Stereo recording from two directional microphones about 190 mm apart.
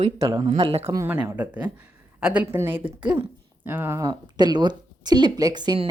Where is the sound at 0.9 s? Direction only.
10° right (ahead or behind).